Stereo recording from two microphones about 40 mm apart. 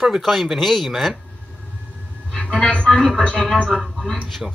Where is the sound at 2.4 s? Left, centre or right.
Left.